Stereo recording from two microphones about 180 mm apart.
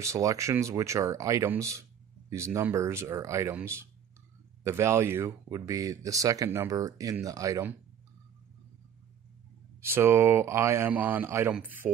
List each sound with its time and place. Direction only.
0.0 s speech: 15° right (ahead or behind)
9.8 s speech: 15° right (ahead or behind)